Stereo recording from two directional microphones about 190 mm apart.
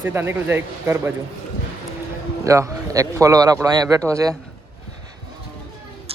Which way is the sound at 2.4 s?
15° right (ahead or behind).